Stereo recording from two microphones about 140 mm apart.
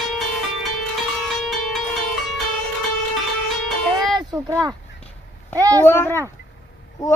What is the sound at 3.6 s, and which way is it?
Music, centre (ahead or behind).